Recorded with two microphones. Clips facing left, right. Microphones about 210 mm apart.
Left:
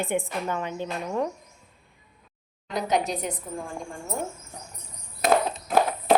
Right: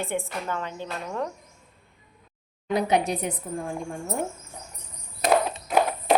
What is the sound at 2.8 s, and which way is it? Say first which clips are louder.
Speech: right 1 dB; 60° right (ahead or behind).